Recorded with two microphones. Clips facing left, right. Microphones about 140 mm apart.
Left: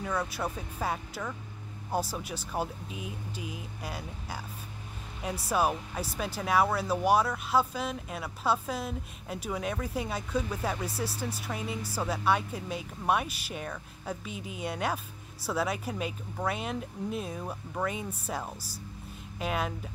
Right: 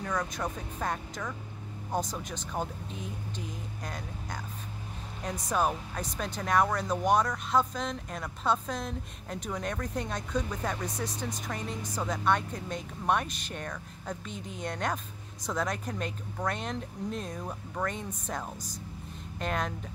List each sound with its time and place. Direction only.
0.0 s speech: 10° left (ahead or behind)